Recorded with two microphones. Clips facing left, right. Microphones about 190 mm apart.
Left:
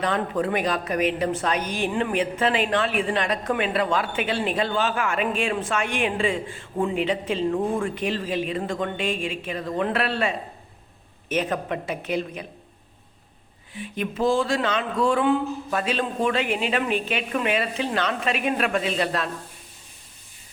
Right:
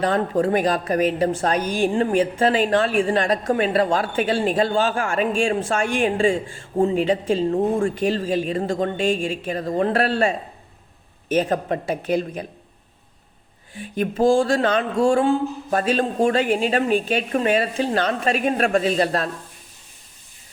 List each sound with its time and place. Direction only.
0.0 s a woman's voice: 40° right (ahead or behind)
5.4 s a woman's voice: 30° right (ahead or behind)
5.6 s a woman's voice: 45° right (ahead or behind)
13.7 s speech: 45° right (ahead or behind)